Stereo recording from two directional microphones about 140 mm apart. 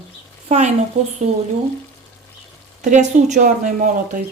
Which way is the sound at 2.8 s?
60° right (ahead or behind).